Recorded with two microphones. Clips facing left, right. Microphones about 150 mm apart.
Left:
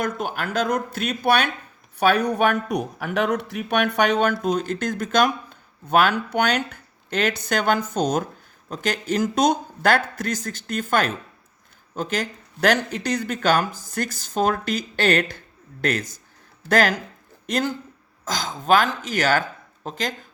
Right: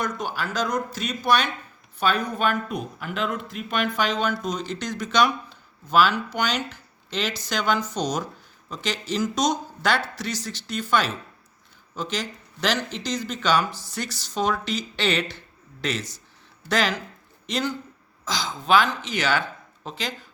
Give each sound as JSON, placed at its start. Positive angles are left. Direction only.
{"t": 0.0, "sound": "speech", "side_deg": 55}